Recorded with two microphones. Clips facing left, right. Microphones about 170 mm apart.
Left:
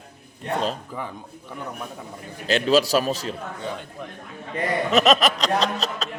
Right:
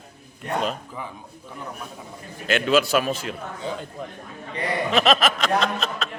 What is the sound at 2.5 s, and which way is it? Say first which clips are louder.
Speech: left 1 dB; 35° left (ahead or behind).